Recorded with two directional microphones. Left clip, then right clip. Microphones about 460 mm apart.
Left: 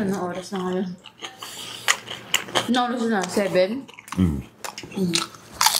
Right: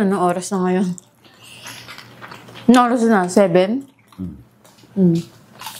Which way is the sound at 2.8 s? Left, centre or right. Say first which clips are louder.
Right 12 dB; right.